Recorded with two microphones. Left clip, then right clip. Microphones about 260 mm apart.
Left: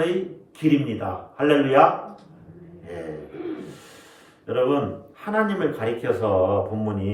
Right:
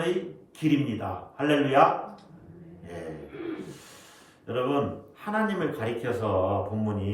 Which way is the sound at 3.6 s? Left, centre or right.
Centre.